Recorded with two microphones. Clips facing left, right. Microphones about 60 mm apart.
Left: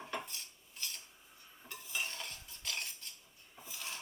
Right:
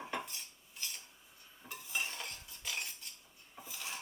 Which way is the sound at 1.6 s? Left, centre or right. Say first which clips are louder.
Right 2 dB; centre.